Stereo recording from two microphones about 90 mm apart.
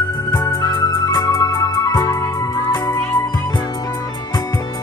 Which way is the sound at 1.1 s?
45° left (ahead or behind).